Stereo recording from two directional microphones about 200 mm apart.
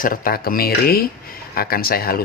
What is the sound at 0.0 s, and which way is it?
Speech, 45° left (ahead or behind).